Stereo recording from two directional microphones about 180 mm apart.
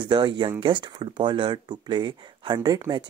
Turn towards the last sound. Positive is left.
turn(degrees=-25)  # may be behind; listen again after turning